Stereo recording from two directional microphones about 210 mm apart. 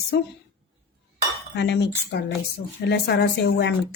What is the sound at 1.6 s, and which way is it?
Speech, 55° left (ahead or behind).